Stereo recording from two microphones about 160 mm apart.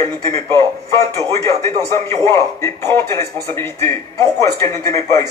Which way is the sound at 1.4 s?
20° left (ahead or behind).